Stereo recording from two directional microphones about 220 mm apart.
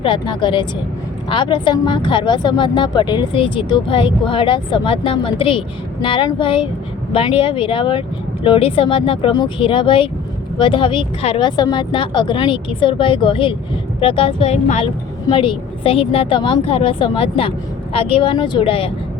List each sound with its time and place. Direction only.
0.0 s speech: 20° left (ahead or behind)